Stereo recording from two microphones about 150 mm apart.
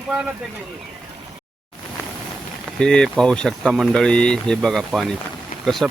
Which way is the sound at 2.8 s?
5° left (ahead or behind).